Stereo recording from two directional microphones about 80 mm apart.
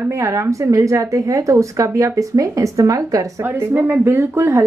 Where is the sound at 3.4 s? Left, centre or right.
Right.